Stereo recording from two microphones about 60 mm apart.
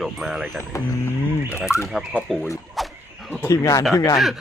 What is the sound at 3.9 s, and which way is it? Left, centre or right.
Speech, left.